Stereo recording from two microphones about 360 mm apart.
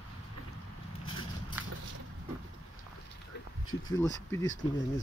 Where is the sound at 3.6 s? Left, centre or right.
Left.